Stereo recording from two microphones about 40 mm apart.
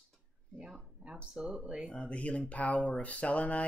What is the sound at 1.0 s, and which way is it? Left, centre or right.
Speech, right.